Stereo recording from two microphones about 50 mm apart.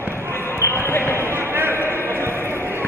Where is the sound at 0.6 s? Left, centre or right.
Left.